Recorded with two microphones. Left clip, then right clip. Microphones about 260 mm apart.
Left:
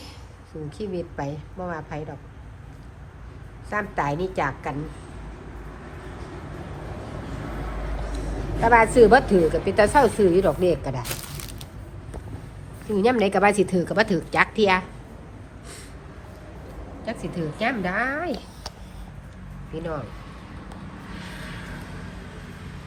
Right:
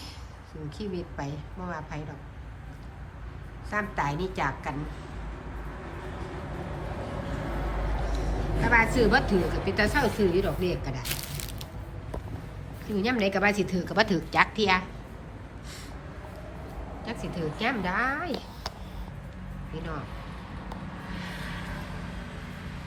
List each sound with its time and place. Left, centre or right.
0.8 s a woman's voice: centre
3.7 s a woman's voice: centre
8.6 s a woman's voice: centre
13.0 s a woman's voice: centre
17.1 s a woman's voice: centre
19.7 s a woman's voice: centre
21.1 s vehicle: right